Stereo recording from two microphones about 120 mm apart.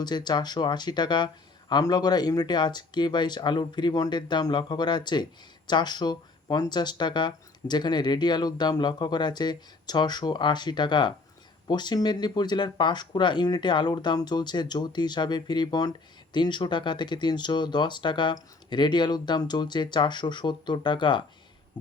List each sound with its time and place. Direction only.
0.0 s speech: 35° left (ahead or behind)